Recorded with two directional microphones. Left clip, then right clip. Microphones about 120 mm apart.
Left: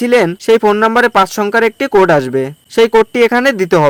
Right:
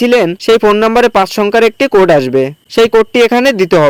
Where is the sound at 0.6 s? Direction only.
15° right (ahead or behind).